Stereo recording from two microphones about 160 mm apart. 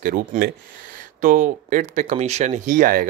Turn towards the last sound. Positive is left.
turn(degrees=-55)  # may be behind; listen again after turning